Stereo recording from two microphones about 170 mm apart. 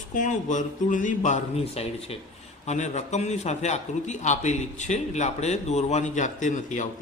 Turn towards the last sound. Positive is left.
turn(degrees=45)  # may be behind; listen again after turning